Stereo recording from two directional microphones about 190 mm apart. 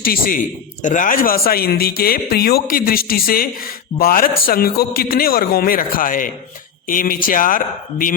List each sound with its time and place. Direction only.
0.0 s a man's voice: 50° left (ahead or behind)